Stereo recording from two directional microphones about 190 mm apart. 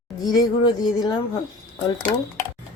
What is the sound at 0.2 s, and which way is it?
Speech, 20° left (ahead or behind).